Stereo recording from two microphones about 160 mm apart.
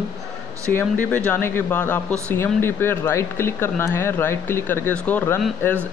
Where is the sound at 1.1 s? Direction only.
10° left (ahead or behind).